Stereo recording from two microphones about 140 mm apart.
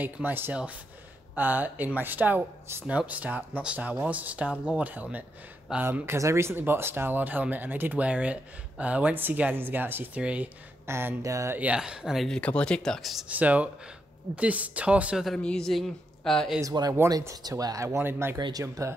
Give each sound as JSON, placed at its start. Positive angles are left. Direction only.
{"t": 0.0, "sound": "speech", "side_deg": -15}
{"t": 13.3, "sound": "a man's voice", "side_deg": -10}
{"t": 16.6, "sound": "speech", "side_deg": -30}
{"t": 16.9, "sound": "speech", "side_deg": -20}